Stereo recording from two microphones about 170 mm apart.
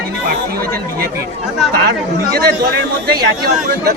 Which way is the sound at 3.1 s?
70° right (ahead or behind).